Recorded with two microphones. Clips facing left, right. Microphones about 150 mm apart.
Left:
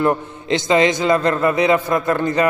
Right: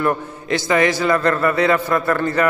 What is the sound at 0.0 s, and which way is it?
Mantra, 20° left (ahead or behind).